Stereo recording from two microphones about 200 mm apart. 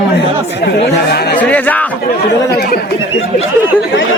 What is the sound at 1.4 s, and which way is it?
Speech, 5° left (ahead or behind).